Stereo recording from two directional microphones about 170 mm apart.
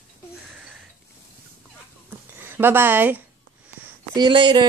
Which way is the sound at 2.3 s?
15° right (ahead or behind).